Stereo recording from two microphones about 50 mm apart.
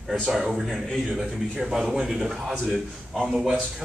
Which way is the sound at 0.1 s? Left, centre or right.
Centre.